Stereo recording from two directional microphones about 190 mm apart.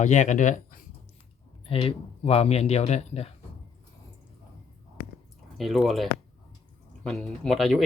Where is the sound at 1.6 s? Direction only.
30° left (ahead or behind).